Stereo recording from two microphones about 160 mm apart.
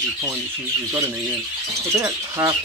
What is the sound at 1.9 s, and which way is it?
Speech, 15° right (ahead or behind).